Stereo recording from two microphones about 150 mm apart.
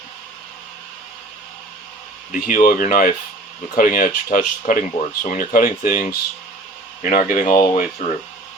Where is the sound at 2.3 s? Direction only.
65° left (ahead or behind).